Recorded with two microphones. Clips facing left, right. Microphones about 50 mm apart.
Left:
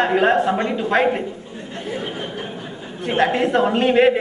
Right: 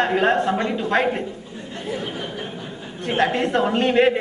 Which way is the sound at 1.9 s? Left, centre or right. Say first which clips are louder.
Left 3 dB; left.